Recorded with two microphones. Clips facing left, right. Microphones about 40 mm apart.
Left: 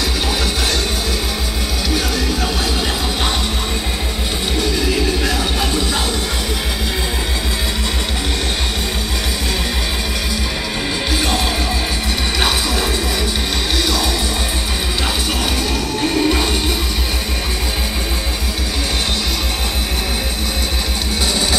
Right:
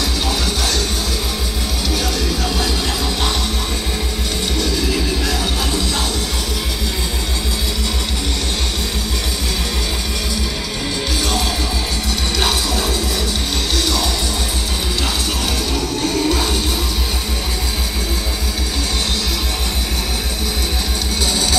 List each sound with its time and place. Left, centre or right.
13.7 s music: centre
16.0 s music: centre